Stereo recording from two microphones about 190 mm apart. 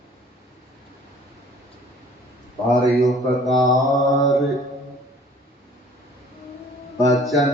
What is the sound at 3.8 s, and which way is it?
Mantra, 20° left (ahead or behind).